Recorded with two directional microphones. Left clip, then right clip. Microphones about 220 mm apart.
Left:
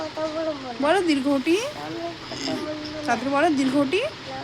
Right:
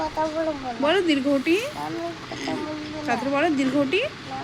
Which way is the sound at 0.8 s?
15° left (ahead or behind).